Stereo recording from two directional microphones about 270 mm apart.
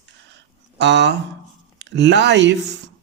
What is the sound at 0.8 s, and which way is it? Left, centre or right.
Speech, right.